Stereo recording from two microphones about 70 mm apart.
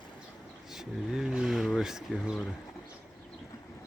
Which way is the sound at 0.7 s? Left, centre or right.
Centre.